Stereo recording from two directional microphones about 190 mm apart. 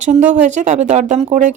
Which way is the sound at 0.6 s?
40° right (ahead or behind).